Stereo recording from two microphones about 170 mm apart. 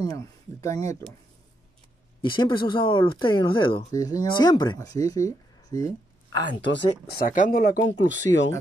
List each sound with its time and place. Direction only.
0.0 s speech: 20° left (ahead or behind)
2.3 s speech: 25° left (ahead or behind)
6.6 s speech: 80° left